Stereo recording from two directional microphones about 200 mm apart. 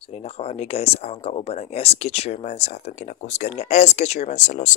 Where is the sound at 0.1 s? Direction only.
30° left (ahead or behind).